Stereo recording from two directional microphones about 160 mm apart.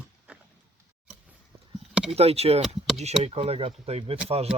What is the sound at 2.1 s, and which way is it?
Speech, 40° right (ahead or behind).